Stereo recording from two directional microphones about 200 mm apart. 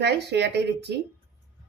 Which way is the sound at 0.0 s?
55° right (ahead or behind).